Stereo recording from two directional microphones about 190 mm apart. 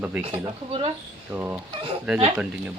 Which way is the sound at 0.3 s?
30° right (ahead or behind).